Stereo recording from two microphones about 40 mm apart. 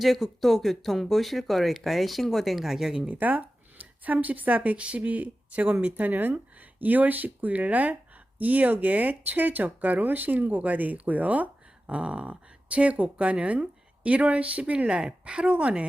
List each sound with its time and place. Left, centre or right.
0.0 s speech: centre
3.1 s speech: right
4.8 s speech: right
11.9 s speech: right